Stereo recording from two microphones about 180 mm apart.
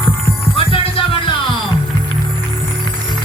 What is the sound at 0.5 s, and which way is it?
Music, 30° left (ahead or behind).